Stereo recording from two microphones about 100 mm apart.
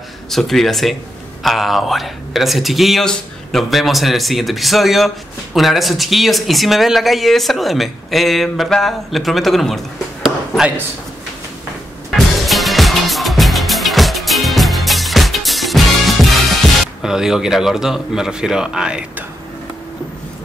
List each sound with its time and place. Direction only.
0.3 s a man's voice: centre (ahead or behind)
10.2 s a sound: 5° right (ahead or behind)
12.4 s music: centre (ahead or behind)
17.0 s a man's voice: 5° right (ahead or behind)